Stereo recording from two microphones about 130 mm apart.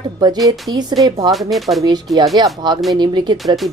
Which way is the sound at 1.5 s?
Centre (ahead or behind).